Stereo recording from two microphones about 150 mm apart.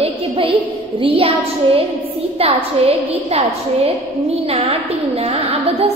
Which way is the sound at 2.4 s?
40° right (ahead or behind).